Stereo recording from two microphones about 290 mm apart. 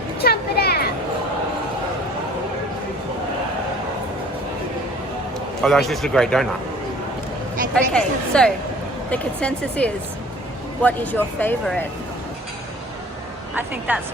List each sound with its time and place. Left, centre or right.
0.2 s a sound: left
5.6 s speech: centre
7.7 s speech: centre
13.6 s speech: centre